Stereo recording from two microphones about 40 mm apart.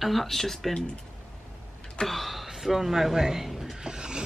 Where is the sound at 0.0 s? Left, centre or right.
Centre.